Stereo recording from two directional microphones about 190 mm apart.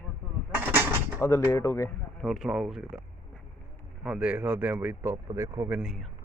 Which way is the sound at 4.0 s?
5° right (ahead or behind).